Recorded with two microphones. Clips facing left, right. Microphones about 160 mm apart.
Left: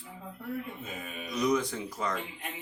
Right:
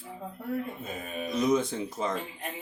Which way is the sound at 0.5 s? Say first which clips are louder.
Right 4 dB; 40° right (ahead or behind).